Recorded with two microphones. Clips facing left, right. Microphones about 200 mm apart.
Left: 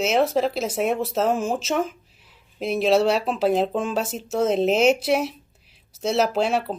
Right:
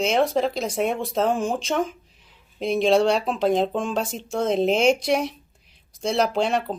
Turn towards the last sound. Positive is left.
turn(degrees=5)  # may be behind; listen again after turning